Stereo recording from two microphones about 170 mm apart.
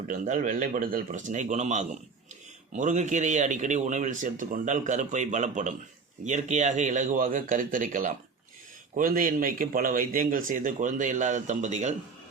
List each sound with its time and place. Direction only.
0.1 s a man's voice: 50° right (ahead or behind)